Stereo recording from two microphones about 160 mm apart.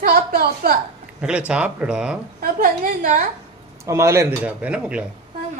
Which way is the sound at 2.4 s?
60° right (ahead or behind).